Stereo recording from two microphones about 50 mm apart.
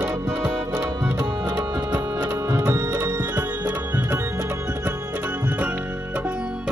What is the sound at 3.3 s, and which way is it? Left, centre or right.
Tabla, right.